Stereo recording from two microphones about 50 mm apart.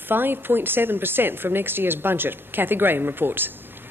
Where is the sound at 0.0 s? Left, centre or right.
Right.